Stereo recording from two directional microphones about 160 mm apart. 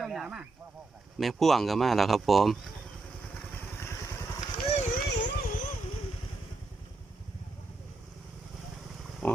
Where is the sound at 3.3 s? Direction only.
15° left (ahead or behind).